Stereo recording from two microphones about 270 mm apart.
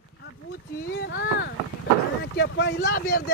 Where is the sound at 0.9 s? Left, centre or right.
Left.